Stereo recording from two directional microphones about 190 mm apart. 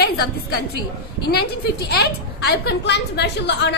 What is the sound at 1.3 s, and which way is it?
A woman's voice, 55° left (ahead or behind).